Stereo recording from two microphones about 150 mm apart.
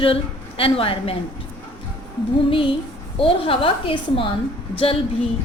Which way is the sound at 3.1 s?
35° left (ahead or behind).